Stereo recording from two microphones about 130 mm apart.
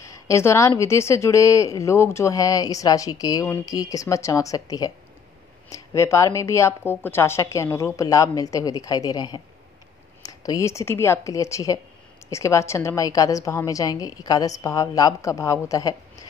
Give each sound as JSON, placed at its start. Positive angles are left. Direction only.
{"t": 0.0, "sound": "a woman's voice", "side_deg": 25}